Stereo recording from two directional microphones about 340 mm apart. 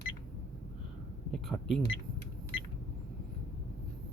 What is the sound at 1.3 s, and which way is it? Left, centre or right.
Speech, centre.